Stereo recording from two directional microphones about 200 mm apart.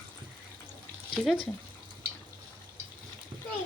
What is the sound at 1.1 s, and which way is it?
Speech, centre (ahead or behind).